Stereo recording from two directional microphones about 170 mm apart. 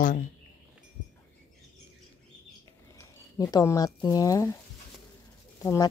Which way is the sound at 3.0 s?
20° left (ahead or behind).